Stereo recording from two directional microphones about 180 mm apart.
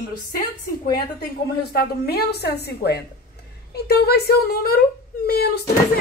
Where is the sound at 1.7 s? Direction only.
60° left (ahead or behind).